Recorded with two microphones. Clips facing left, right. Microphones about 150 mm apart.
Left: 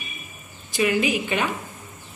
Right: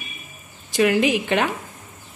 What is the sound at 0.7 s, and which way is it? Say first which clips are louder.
Speech: right 4 dB; 70° right (ahead or behind).